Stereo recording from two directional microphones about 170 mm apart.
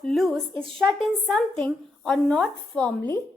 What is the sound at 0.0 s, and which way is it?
A woman's voice, centre (ahead or behind).